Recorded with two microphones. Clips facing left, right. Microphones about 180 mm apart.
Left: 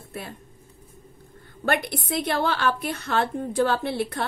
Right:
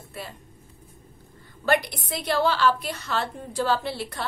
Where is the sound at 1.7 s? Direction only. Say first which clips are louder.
Right 1 dB; 55° left (ahead or behind).